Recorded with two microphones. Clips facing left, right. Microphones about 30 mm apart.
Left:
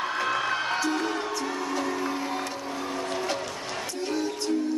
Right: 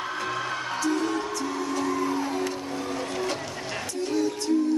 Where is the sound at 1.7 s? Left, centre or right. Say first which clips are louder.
Right 4 dB; centre.